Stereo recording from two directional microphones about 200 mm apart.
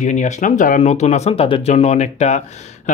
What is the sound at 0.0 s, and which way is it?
Speech, 35° left (ahead or behind).